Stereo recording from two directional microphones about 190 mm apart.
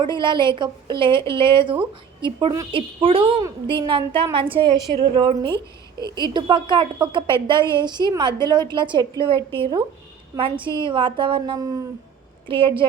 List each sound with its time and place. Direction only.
0.0 s a woman's voice: 25° right (ahead or behind)